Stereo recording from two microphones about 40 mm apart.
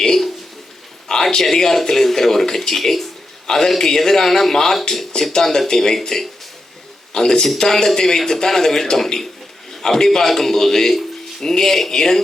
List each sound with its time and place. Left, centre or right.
1.0 s a man's voice: centre